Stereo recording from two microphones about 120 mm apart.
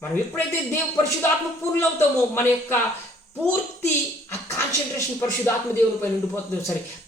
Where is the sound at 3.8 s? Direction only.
20° left (ahead or behind).